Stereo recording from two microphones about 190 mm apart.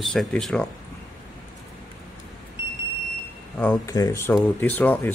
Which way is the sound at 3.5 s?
5° left (ahead or behind).